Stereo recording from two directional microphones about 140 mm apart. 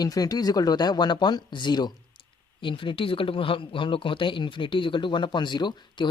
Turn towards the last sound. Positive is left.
turn(degrees=30)  # may be behind; listen again after turning